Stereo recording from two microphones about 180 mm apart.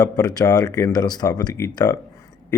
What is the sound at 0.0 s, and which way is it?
Speech, 20° left (ahead or behind).